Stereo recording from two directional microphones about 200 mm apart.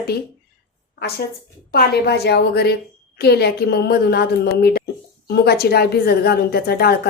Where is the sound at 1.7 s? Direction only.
55° left (ahead or behind).